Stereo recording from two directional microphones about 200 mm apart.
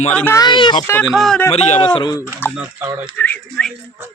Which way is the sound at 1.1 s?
Centre (ahead or behind).